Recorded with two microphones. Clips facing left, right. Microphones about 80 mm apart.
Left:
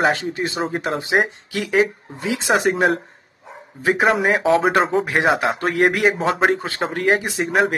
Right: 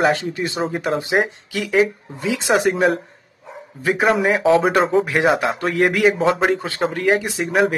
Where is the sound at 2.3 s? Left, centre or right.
Left.